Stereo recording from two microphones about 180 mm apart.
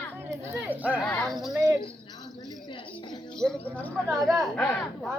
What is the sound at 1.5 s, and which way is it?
Speech, 15° right (ahead or behind).